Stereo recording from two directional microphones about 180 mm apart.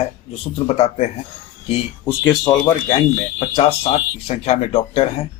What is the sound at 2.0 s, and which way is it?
Speech, 20° left (ahead or behind).